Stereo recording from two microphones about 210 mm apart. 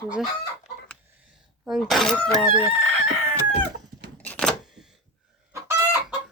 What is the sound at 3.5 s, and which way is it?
Chicken, 50° right (ahead or behind).